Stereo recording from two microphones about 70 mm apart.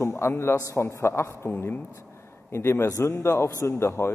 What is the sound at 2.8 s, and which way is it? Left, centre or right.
Speech, left.